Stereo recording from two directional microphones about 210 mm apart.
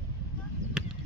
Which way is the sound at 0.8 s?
Centre (ahead or behind).